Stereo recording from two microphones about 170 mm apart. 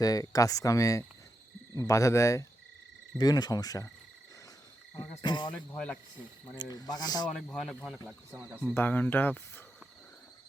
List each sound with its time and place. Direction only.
0.0 s speech: 20° left (ahead or behind)
5.2 s speech: 25° left (ahead or behind)
5.7 s speech: 5° left (ahead or behind)
6.6 s speech: 25° left (ahead or behind)
7.3 s a man's voice: 5° left (ahead or behind)
8.3 s speech: 15° right (ahead or behind)
8.7 s speech: 10° left (ahead or behind)